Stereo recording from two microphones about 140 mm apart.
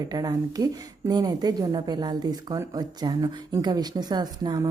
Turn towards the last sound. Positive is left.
turn(degrees=-30)  # may be behind; listen again after turning